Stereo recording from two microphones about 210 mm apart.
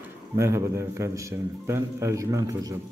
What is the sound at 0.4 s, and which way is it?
A man's voice, 15° right (ahead or behind).